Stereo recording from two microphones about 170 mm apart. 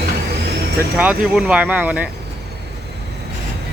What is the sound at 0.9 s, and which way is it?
Speech, 5° right (ahead or behind).